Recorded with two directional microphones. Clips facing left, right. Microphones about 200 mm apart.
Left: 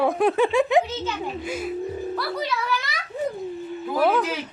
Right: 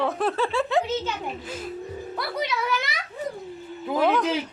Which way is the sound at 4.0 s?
5° left (ahead or behind).